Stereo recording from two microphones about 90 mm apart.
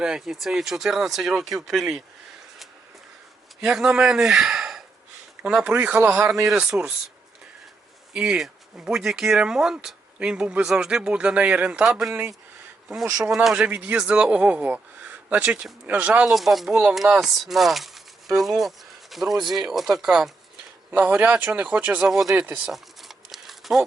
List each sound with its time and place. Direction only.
0.0 s speech: 5° right (ahead or behind)
3.6 s speech: 5° right (ahead or behind)
5.6 s speech: 15° right (ahead or behind)
8.1 s speech: 10° right (ahead or behind)
13.1 s speech: 20° right (ahead or behind)
13.3 s speech: 10° right (ahead or behind)
16.3 s speech: centre (ahead or behind)
20.9 s speech: 20° right (ahead or behind)
22.0 s speech: 5° right (ahead or behind)
22.4 s speech: 15° right (ahead or behind)
22.7 s a sound: centre (ahead or behind)